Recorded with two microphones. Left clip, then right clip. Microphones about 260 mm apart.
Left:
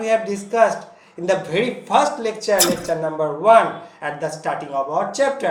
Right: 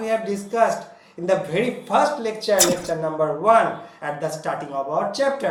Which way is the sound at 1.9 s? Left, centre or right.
Centre.